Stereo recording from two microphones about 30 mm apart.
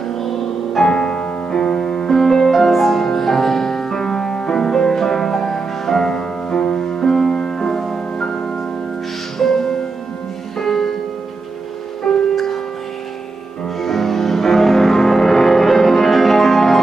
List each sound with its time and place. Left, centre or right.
0.8 s music: left
2.0 s music: centre
4.3 s music: left
4.6 s music: centre
6.6 s music: left
7.1 s music: centre
12.1 s music: centre
13.7 s music: centre